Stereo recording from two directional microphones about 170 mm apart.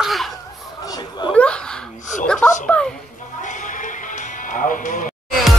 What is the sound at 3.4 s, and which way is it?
Music, 50° left (ahead or behind).